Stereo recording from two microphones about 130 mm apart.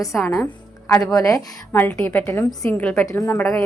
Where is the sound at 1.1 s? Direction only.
25° left (ahead or behind).